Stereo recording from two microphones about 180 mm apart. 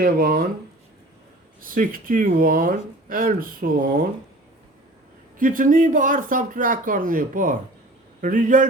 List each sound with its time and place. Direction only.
0.0 s speech: 55° right (ahead or behind)
1.6 s speech: 50° right (ahead or behind)
5.4 s speech: 50° right (ahead or behind)